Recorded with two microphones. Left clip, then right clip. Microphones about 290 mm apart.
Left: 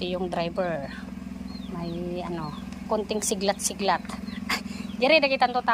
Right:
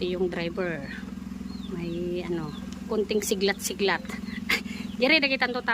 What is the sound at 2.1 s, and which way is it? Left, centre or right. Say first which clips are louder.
Speech: right 1 dB; centre.